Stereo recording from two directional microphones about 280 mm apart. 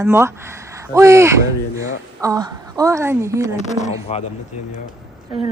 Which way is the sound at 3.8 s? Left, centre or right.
Left.